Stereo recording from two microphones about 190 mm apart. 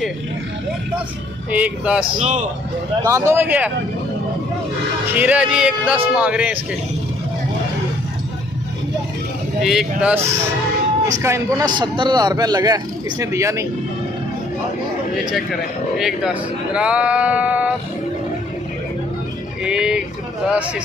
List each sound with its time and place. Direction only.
1.5 s speech: 5° right (ahead or behind)
5.1 s speech: 5° right (ahead or behind)
9.6 s a man's voice: centre (ahead or behind)
16.0 s speech: centre (ahead or behind)
19.6 s speech: 5° right (ahead or behind)